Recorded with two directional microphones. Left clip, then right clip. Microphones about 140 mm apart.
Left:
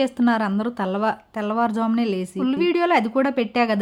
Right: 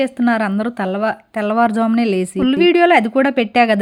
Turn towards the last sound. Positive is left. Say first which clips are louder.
# right 7 dB
turn(degrees=-25)  # may be behind; listen again after turning